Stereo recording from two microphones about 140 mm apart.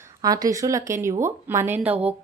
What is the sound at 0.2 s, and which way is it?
Speech, 25° right (ahead or behind).